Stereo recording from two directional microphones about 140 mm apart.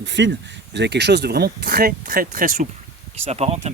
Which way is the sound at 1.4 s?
90° right.